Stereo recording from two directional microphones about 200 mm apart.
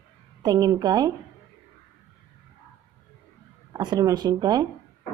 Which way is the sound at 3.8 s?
20° right (ahead or behind).